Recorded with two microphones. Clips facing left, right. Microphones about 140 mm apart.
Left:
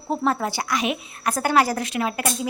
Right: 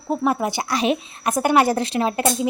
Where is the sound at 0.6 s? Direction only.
30° right (ahead or behind).